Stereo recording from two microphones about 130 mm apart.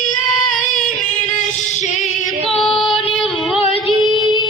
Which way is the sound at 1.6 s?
65° left (ahead or behind).